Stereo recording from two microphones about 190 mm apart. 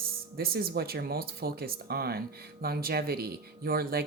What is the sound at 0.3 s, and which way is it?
Speech, 55° right (ahead or behind).